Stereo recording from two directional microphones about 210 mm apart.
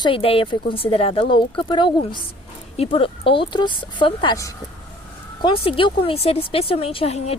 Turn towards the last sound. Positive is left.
turn(degrees=30)  # may be behind; listen again after turning